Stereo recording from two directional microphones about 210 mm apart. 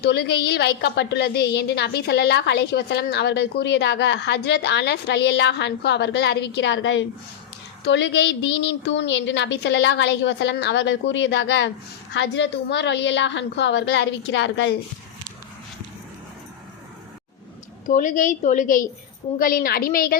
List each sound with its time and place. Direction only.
0.0 s a woman's voice: 50° left (ahead or behind)
17.8 s a woman's voice: 40° left (ahead or behind)